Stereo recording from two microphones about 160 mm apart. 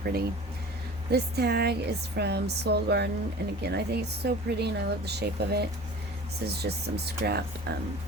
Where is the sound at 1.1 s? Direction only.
85° right.